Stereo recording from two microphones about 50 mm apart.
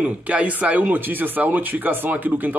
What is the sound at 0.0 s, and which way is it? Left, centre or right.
Speech, right.